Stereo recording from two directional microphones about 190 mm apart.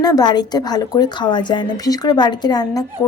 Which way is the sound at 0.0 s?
20° left (ahead or behind).